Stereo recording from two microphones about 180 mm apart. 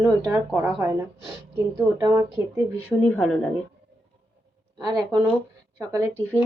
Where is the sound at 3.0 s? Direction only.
5° left (ahead or behind).